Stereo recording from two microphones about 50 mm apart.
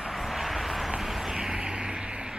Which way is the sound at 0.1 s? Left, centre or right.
Centre.